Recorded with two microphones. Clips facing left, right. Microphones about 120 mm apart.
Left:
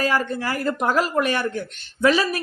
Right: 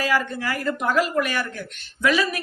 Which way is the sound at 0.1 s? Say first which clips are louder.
Left 1 dB; 30° left (ahead or behind).